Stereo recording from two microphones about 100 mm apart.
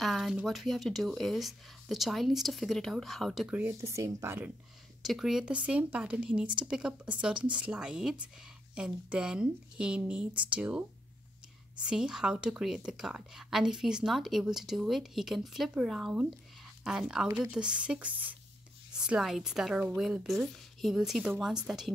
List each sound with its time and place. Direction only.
0.0 s a woman's voice: centre (ahead or behind)
3.4 s speech: 15° right (ahead or behind)
3.8 s speech: 30° right (ahead or behind)
5.0 s a woman's voice: centre (ahead or behind)